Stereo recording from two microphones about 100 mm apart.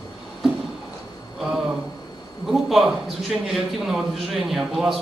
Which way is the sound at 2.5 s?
Centre (ahead or behind).